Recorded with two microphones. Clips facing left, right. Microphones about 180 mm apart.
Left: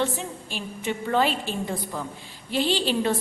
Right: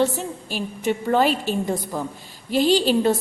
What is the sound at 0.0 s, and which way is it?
A woman's voice, 40° right (ahead or behind).